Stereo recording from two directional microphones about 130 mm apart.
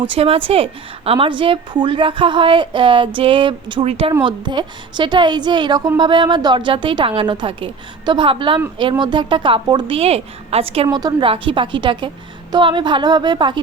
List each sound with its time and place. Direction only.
0.1 s a woman's voice: 45° right (ahead or behind)
4.2 s a woman's voice: 35° right (ahead or behind)
9.9 s a woman's voice: 50° right (ahead or behind)
10.9 s a woman's voice: 35° right (ahead or behind)